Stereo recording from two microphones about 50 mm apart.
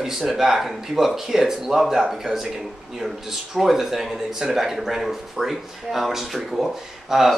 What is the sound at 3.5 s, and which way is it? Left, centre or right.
Speech, centre.